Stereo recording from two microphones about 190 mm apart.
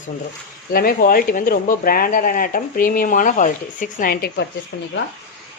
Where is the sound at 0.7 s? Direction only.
50° left (ahead or behind).